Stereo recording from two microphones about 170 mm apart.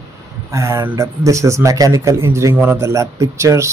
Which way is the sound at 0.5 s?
20° right (ahead or behind).